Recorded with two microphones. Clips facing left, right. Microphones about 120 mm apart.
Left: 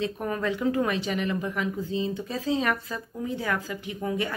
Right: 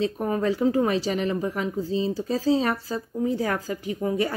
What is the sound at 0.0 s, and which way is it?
Speech, 35° right (ahead or behind).